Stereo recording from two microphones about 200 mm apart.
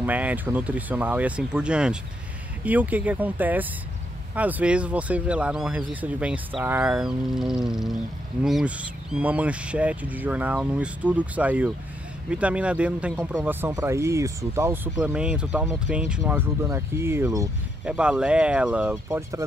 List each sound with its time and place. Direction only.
0.0 s speech: 10° right (ahead or behind)
13.1 s speech: 15° right (ahead or behind)